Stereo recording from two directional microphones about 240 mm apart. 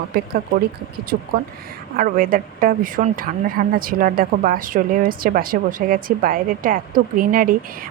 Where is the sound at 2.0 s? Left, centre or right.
Right.